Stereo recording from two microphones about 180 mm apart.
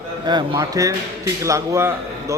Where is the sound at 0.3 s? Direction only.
25° right (ahead or behind).